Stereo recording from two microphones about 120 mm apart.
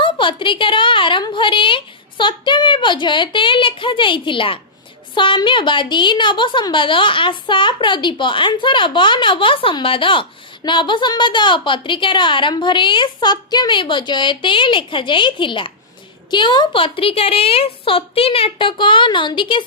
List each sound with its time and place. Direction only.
0.0 s a woman's voice: 45° left (ahead or behind)